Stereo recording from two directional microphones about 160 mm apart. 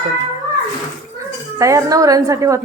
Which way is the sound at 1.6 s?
20° right (ahead or behind).